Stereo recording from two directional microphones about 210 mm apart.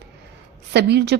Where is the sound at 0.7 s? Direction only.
50° right (ahead or behind).